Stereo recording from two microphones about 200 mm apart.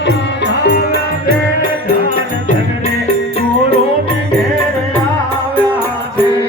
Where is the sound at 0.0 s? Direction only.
60° left (ahead or behind).